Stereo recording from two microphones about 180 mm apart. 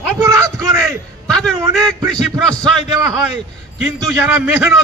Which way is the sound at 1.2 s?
5° left (ahead or behind).